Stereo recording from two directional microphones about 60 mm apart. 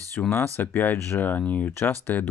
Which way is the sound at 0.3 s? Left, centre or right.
Left.